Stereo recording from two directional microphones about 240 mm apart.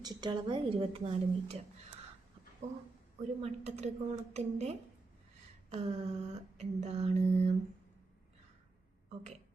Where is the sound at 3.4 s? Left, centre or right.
Right.